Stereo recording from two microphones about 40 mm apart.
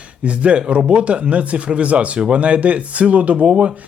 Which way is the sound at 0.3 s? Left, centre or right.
Right.